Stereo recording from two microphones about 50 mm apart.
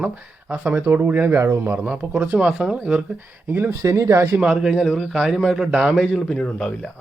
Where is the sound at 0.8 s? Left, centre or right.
Right.